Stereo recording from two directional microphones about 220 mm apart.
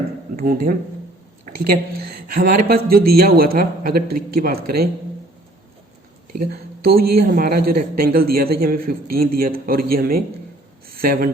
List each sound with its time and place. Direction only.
0.3 s speech: 45° right (ahead or behind)
6.5 s speech: 45° right (ahead or behind)